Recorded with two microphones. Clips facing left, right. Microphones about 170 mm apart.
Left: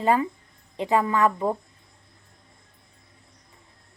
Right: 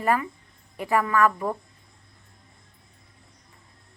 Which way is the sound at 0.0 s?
25° left (ahead or behind).